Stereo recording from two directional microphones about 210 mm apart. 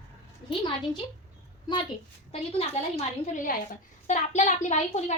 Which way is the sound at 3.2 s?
40° left (ahead or behind).